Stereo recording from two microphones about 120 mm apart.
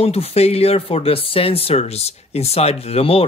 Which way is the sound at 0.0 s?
60° left (ahead or behind).